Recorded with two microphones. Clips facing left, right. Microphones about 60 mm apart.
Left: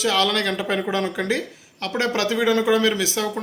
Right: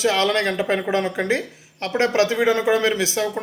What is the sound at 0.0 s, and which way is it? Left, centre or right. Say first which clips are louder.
Speech: right 2 dB; right.